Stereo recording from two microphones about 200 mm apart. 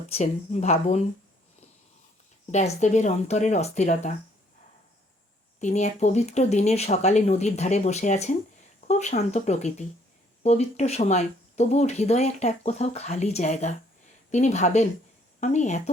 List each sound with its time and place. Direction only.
0.1 s speech: 35° left (ahead or behind)
2.5 s speech: 35° left (ahead or behind)
5.5 s speech: 35° left (ahead or behind)